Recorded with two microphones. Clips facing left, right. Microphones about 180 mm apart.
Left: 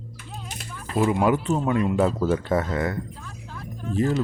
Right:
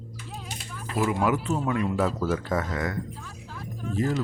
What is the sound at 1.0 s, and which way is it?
Speech, 25° left (ahead or behind).